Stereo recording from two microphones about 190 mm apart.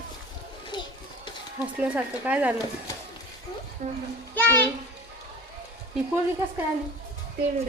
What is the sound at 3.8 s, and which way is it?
Speech, 40° right (ahead or behind).